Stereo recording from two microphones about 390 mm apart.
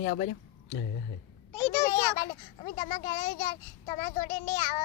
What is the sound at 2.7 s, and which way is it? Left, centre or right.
A child's voice, centre.